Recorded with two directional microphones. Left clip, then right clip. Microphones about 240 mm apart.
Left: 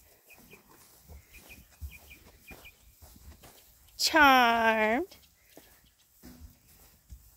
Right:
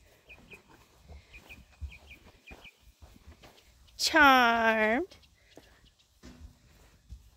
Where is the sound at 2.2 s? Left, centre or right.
Left.